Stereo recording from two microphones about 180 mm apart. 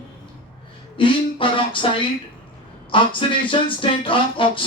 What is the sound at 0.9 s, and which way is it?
Speech, 30° left (ahead or behind).